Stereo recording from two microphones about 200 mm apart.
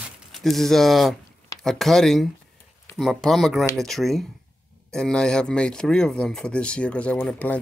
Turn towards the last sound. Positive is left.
turn(degrees=10)  # may be behind; listen again after turning